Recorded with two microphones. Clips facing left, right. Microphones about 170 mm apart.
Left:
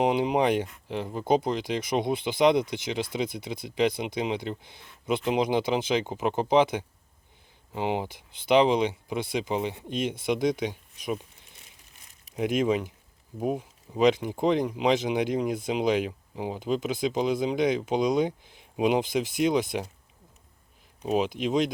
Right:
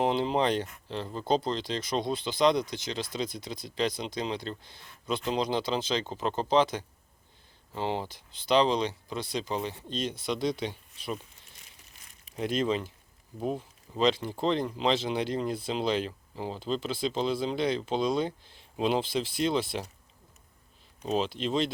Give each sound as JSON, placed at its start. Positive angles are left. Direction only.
{"t": 0.0, "sound": "speech", "side_deg": 15}
{"t": 12.4, "sound": "speech", "side_deg": 10}
{"t": 21.0, "sound": "speech", "side_deg": 10}